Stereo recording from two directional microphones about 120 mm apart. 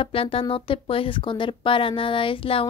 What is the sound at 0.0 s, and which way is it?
Speech, 50° left (ahead or behind).